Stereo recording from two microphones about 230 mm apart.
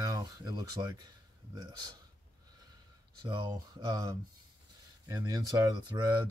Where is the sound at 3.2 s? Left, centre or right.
Centre.